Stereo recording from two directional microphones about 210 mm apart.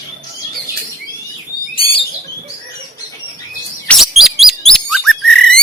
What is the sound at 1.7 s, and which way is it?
Bird, 25° left (ahead or behind).